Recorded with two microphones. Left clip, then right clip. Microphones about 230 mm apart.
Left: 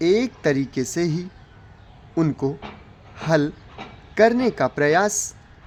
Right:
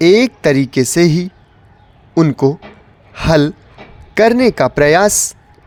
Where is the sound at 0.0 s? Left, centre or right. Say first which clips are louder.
Right 10 dB; right.